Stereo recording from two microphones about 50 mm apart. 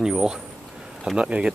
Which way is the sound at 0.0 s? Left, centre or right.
Centre.